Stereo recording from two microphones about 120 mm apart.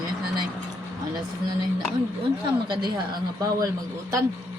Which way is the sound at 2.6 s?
40° right (ahead or behind).